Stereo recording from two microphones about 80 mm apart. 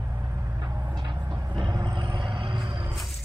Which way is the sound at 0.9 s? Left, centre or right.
Right.